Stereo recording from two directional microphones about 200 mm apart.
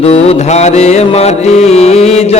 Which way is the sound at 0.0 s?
30° left (ahead or behind).